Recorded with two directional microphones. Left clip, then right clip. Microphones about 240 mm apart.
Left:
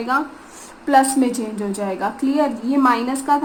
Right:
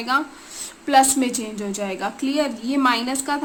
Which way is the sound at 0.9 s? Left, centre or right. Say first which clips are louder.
Left 1 dB; right.